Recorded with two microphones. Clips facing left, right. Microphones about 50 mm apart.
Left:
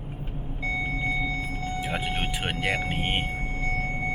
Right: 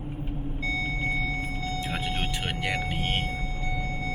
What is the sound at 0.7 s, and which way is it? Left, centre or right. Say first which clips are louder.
Vehicle: left 2 dB; left.